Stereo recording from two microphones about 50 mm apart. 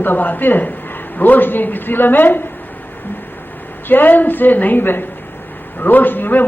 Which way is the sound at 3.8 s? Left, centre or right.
Left.